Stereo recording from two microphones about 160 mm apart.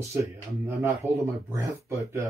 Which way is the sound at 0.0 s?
15° right (ahead or behind).